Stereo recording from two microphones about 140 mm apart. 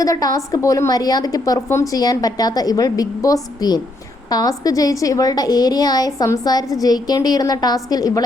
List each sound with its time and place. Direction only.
0.0 s a woman's voice: 25° left (ahead or behind)